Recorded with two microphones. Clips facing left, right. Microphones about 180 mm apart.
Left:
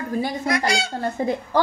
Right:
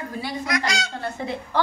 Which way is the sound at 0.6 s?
30° left (ahead or behind).